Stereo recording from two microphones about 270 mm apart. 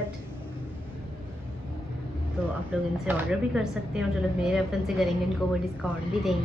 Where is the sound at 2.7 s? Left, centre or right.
Centre.